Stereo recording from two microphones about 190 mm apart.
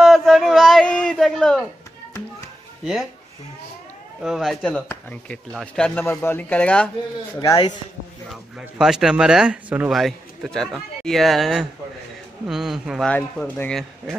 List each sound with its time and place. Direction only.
0.0 s a sound: centre (ahead or behind)
2.8 s speech: centre (ahead or behind)
4.2 s speech: centre (ahead or behind)
7.3 s speech: 20° left (ahead or behind)
8.3 s speech: 5° right (ahead or behind)